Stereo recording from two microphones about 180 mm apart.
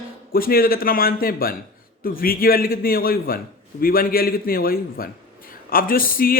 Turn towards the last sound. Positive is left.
turn(degrees=55)  # may be behind; listen again after turning